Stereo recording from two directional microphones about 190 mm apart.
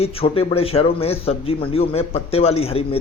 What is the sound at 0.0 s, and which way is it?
Speech, 30° left (ahead or behind).